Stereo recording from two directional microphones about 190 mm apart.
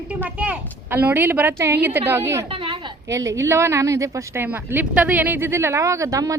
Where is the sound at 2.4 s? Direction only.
25° right (ahead or behind).